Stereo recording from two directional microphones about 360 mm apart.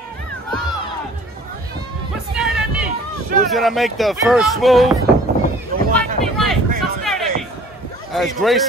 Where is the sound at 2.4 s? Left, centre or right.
Centre.